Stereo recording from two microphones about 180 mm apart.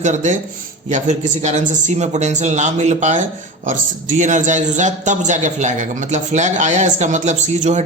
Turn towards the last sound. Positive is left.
turn(degrees=-40)  # may be behind; listen again after turning